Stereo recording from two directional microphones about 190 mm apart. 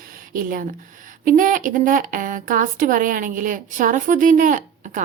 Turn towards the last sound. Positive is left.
turn(degrees=-45)  # may be behind; listen again after turning